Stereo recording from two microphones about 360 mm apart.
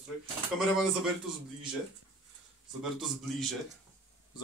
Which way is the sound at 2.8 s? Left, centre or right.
Centre.